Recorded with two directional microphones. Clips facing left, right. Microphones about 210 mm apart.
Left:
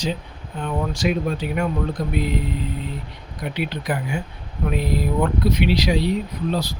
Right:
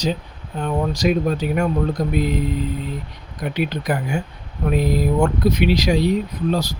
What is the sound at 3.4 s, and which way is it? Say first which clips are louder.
Speech: right 4 dB; 45° right (ahead or behind).